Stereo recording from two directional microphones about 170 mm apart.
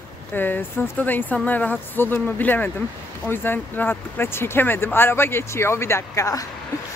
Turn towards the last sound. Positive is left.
turn(degrees=15)  # may be behind; listen again after turning